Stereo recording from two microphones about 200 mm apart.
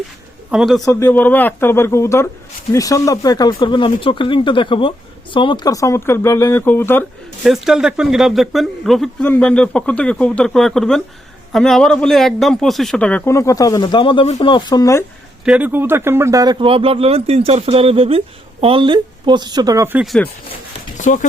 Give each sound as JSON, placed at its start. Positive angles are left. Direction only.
{"t": 0.5, "sound": "speech", "side_deg": 0}
{"t": 0.9, "sound": "a man's voice", "side_deg": 15}
{"t": 7.4, "sound": "a man's voice", "side_deg": 0}
{"t": 15.4, "sound": "speech", "side_deg": -10}
{"t": 21.0, "sound": "speech", "side_deg": 40}